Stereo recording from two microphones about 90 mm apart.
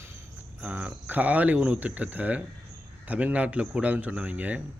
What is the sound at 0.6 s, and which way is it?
Speech, 15° right (ahead or behind).